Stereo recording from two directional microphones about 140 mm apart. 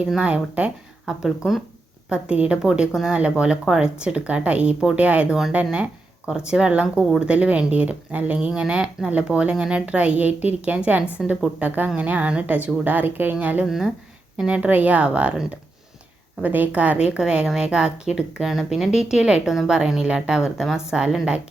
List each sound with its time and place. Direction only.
0.0 s a woman's voice: 5° right (ahead or behind)
11.6 s a woman's voice: 15° right (ahead or behind)